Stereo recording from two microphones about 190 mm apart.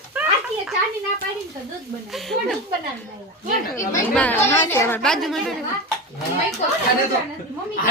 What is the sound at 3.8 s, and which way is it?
A woman's voice, 15° left (ahead or behind).